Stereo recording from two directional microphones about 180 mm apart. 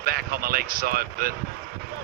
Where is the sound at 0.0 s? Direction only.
55° right (ahead or behind).